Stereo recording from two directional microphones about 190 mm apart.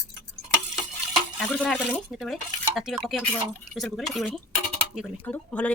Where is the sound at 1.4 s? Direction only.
5° left (ahead or behind).